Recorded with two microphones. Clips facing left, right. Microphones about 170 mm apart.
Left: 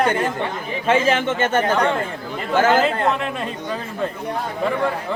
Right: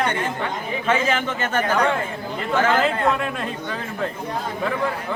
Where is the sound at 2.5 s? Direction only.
35° left (ahead or behind).